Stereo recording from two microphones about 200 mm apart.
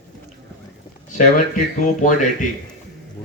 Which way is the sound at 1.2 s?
40° left (ahead or behind).